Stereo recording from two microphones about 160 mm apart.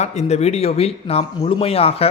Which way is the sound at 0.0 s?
45° left (ahead or behind).